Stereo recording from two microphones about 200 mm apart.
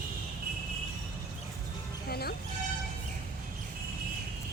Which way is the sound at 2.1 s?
50° left (ahead or behind).